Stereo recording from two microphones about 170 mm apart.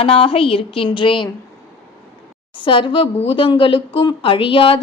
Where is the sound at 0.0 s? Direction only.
35° left (ahead or behind).